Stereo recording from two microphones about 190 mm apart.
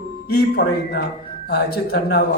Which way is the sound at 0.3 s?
55° left (ahead or behind).